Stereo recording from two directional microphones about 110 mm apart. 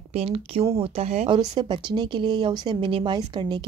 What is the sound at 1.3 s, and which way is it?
A woman's voice, 40° right (ahead or behind).